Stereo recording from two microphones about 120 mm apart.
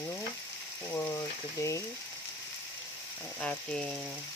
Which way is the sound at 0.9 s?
20° left (ahead or behind).